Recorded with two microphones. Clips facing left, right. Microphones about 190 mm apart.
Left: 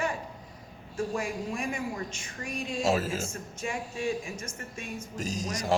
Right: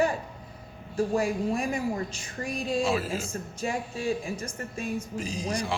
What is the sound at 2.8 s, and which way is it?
Speech, 45° left (ahead or behind).